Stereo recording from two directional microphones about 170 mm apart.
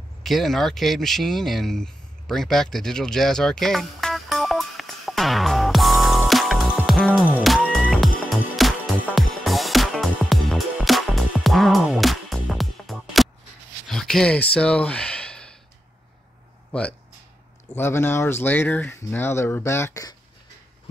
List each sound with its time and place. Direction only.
0.2 s a sound: centre (ahead or behind)
7.0 s music: 5° left (ahead or behind)
13.8 s sigh: centre (ahead or behind)
17.7 s speech: 15° left (ahead or behind)